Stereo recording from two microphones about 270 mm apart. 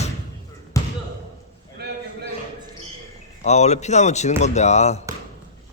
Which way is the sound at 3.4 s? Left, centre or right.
Left.